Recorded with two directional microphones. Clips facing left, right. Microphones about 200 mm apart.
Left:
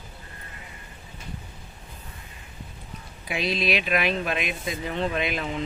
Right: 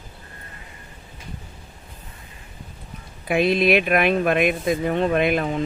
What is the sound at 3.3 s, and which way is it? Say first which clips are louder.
Speech: right 8 dB; 55° right (ahead or behind).